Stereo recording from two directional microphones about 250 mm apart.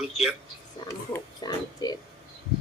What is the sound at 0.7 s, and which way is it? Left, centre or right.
Speech, centre.